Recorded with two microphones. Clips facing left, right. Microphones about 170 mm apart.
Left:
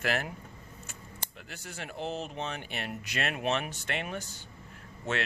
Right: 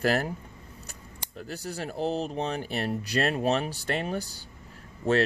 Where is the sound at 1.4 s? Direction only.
35° right (ahead or behind).